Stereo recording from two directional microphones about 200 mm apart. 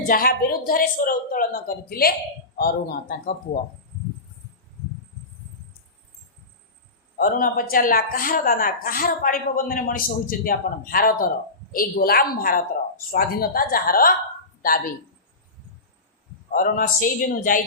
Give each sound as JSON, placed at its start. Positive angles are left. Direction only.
{"t": 0.1, "sound": "a woman's voice", "side_deg": 50}
{"t": 7.2, "sound": "a woman's voice", "side_deg": 45}
{"t": 16.5, "sound": "a woman's voice", "side_deg": 40}